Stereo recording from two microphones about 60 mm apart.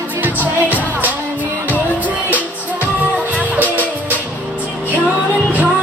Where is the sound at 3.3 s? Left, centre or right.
Right.